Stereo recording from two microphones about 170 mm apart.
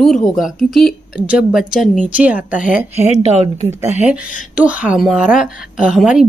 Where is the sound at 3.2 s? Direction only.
40° right (ahead or behind).